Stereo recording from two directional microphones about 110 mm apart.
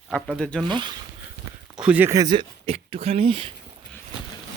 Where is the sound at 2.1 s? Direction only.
35° right (ahead or behind).